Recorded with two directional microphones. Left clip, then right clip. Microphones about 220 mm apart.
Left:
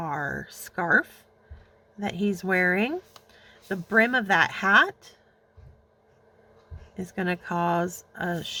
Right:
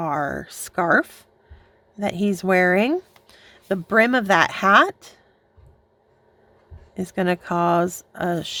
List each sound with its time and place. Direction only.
0.0 s speech: 40° right (ahead or behind)
6.9 s speech: 40° right (ahead or behind)